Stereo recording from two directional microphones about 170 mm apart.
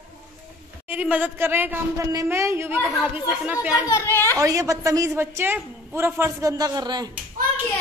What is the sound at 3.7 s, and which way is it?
Speech, 20° left (ahead or behind).